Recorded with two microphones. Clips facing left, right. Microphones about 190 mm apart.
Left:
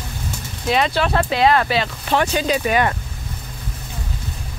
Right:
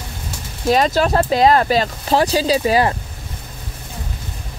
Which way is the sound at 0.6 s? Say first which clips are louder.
Right 4 dB; 40° right (ahead or behind).